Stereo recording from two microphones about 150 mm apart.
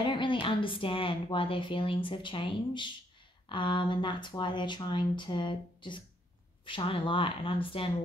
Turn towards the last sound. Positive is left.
turn(degrees=35)  # may be behind; listen again after turning